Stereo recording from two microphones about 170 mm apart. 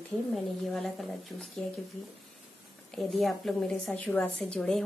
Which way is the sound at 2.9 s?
Centre (ahead or behind).